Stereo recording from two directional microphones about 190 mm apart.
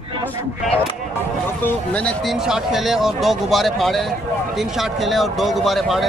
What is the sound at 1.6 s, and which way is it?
Speech, 5° left (ahead or behind).